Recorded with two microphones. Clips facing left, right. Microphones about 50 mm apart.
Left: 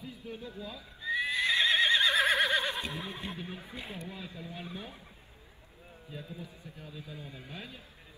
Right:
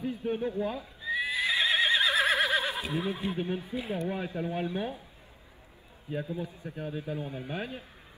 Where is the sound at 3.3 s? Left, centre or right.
Right.